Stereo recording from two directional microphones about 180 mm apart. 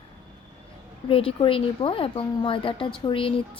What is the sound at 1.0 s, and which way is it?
A woman's voice, 30° left (ahead or behind).